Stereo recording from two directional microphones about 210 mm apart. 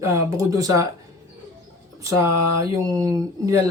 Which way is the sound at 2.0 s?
15° right (ahead or behind).